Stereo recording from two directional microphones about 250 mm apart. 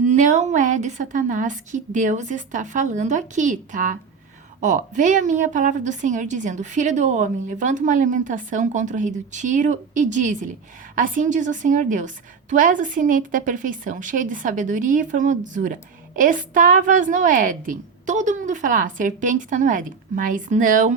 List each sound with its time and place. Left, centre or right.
0.0 s a woman's voice: right